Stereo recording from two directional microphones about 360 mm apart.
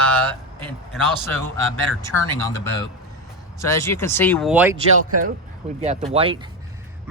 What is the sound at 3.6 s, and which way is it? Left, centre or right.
Speech, centre.